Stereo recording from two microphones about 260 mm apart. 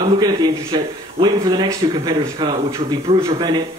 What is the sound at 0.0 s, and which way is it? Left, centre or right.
Speech, centre.